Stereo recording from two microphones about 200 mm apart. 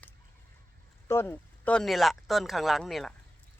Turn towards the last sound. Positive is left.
turn(degrees=0)  # may be behind; listen again after turning